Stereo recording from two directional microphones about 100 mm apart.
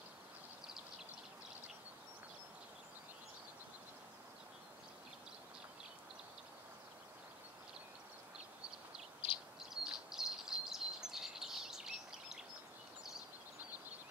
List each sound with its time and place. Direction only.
9.2 s owl: 75° left (ahead or behind)
9.6 s bird: 5° right (ahead or behind)